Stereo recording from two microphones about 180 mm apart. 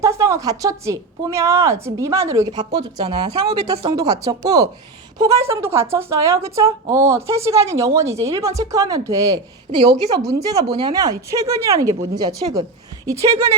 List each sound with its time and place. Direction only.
0.0 s a woman's voice: 15° right (ahead or behind)